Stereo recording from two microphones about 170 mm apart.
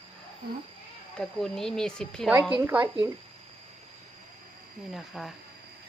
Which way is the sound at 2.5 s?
10° right (ahead or behind).